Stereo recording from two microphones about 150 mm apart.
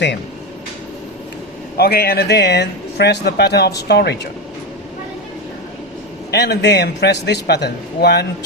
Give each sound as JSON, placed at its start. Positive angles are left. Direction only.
{"t": 1.7, "sound": "a man's voice", "side_deg": 90}
{"t": 6.3, "sound": "a man's voice", "side_deg": 90}